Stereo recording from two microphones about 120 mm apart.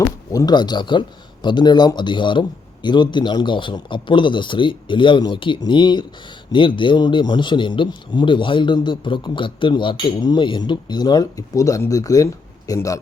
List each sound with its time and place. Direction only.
0.3 s a man's voice: 35° left (ahead or behind)